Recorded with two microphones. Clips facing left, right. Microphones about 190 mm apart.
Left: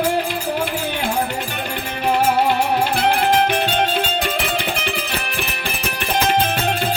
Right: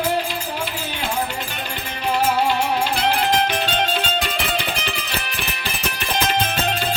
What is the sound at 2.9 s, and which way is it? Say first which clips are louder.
Music: left 3 dB; 55° left (ahead or behind).